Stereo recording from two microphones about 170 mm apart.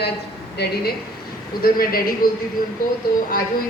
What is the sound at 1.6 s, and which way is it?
Speech, 60° left (ahead or behind).